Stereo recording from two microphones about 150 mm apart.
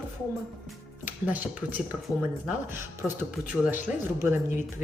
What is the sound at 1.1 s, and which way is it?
A woman's voice, 10° right (ahead or behind).